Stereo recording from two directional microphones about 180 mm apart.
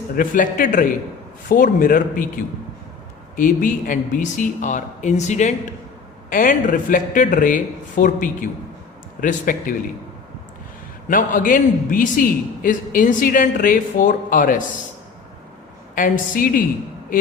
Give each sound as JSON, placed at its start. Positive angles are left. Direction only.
{"t": 0.2, "sound": "speech", "side_deg": 50}
{"t": 3.3, "sound": "speech", "side_deg": 50}
{"t": 11.1, "sound": "speech", "side_deg": 45}
{"t": 16.0, "sound": "speech", "side_deg": 50}